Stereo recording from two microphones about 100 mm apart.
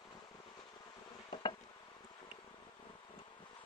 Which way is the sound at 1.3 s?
50° left (ahead or behind).